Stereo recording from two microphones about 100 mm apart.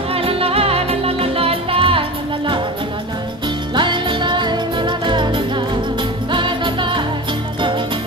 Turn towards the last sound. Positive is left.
turn(degrees=-55)  # may be behind; listen again after turning